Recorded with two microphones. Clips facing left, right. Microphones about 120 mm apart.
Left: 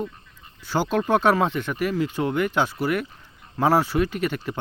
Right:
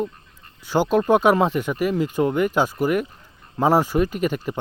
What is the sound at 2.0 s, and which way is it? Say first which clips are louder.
Speech: right 4 dB; 45° right (ahead or behind).